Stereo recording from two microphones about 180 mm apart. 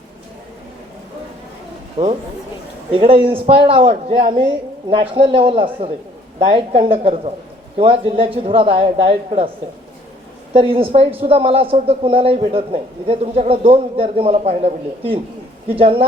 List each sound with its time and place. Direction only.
2.0 s speech: 25° right (ahead or behind)
10.5 s speech: 30° right (ahead or behind)